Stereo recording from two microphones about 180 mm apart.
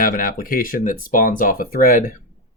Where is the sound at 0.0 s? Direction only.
50° left (ahead or behind).